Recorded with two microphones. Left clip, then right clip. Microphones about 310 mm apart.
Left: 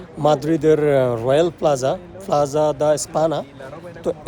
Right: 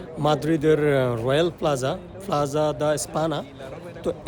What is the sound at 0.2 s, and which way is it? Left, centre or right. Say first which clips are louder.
Speech: left 5 dB; centre.